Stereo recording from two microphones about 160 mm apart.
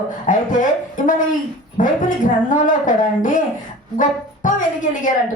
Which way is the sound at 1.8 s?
55° left (ahead or behind).